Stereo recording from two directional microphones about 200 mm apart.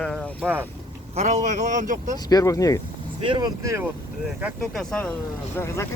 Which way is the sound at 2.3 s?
15° left (ahead or behind).